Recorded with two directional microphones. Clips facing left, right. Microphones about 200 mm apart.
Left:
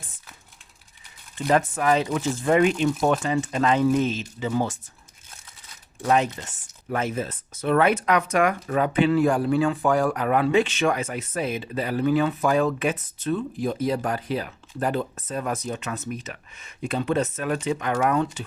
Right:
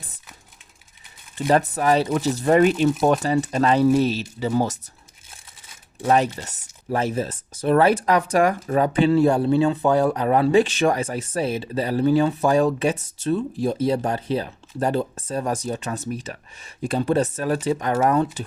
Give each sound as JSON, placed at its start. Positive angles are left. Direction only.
{"t": 1.5, "sound": "speech", "side_deg": -40}
{"t": 6.1, "sound": "speech", "side_deg": -40}